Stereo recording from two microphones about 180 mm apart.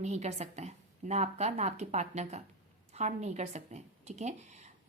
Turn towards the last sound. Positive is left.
turn(degrees=-40)  # may be behind; listen again after turning